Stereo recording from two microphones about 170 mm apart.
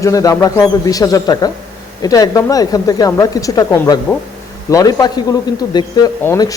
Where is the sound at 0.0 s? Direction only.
20° left (ahead or behind).